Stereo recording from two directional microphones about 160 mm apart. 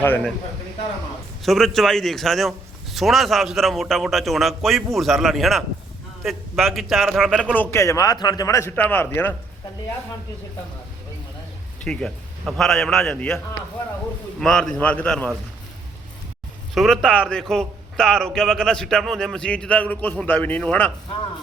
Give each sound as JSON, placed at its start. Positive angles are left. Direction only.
{"t": 0.0, "sound": "a man's voice", "side_deg": 10}
{"t": 1.4, "sound": "a man's voice", "side_deg": 0}
{"t": 7.5, "sound": "a man's voice", "side_deg": 15}
{"t": 11.8, "sound": "a man's voice", "side_deg": 5}
{"t": 16.7, "sound": "a man's voice", "side_deg": 0}